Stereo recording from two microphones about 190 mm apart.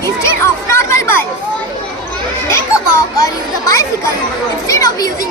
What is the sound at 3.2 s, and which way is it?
Children playing, 15° left (ahead or behind).